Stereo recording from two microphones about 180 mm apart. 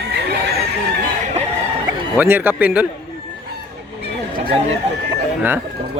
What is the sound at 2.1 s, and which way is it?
Speech, 10° right (ahead or behind).